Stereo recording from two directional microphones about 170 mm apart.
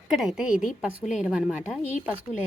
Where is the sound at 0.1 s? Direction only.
Centre (ahead or behind).